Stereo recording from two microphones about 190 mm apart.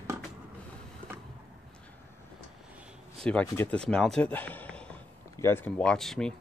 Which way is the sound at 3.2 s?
10° left (ahead or behind).